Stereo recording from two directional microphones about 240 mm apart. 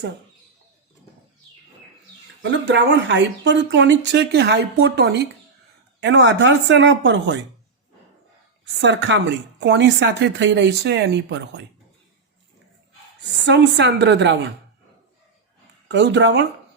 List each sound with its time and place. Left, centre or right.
2.4 s speech: right
8.8 s speech: right
13.4 s speech: right
15.9 s speech: right